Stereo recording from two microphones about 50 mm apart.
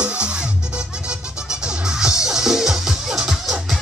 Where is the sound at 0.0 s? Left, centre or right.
Right.